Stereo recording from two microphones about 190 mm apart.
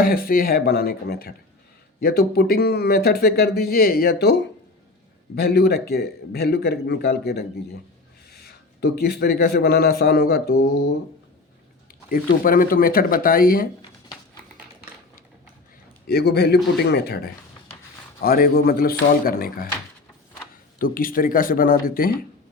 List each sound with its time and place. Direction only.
0.0 s a man's voice: 50° left (ahead or behind)
11.9 s speech: 50° left (ahead or behind)
16.0 s speech: 60° left (ahead or behind)
20.7 s speech: 50° left (ahead or behind)